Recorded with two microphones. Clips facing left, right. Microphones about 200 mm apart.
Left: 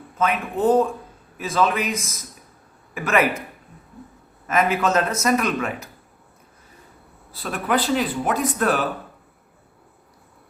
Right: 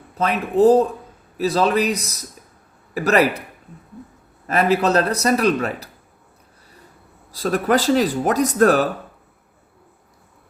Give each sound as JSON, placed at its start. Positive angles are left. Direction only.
{"t": 0.2, "sound": "a man's voice", "side_deg": -35}
{"t": 4.4, "sound": "a man's voice", "side_deg": -35}
{"t": 7.3, "sound": "speech", "side_deg": -40}